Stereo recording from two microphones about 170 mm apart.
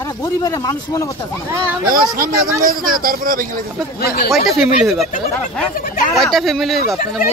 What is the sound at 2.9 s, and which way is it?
Speech, 55° right (ahead or behind).